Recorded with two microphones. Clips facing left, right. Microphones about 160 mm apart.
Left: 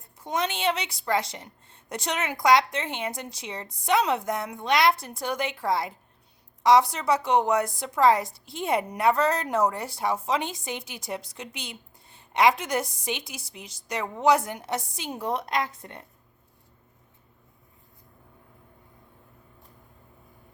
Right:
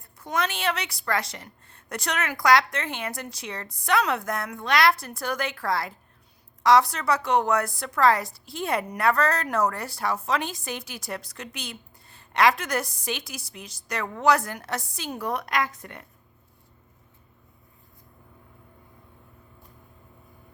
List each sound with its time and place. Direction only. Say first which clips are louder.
0.2 s a woman's voice: even; 20° left (ahead or behind)